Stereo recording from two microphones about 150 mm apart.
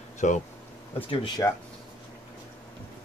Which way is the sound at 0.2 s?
55° left (ahead or behind).